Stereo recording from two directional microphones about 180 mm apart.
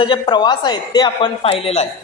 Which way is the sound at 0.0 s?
25° left (ahead or behind).